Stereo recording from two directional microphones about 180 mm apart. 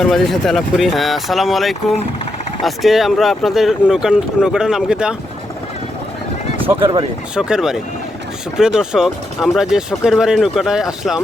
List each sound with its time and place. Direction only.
0.0 s speech: centre (ahead or behind)
6.7 s speech: 30° right (ahead or behind)
7.3 s speech: 5° right (ahead or behind)